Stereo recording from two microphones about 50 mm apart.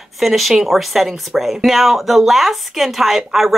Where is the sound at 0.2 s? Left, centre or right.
Centre.